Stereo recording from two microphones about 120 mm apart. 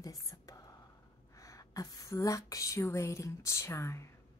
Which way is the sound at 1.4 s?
30° left (ahead or behind).